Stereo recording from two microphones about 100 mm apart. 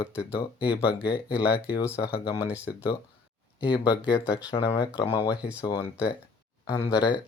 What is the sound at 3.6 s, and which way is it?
Speech, 55° left (ahead or behind).